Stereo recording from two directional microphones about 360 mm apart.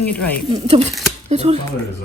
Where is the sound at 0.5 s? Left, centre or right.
Centre.